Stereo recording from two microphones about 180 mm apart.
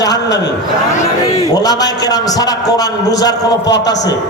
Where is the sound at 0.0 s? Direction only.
20° left (ahead or behind).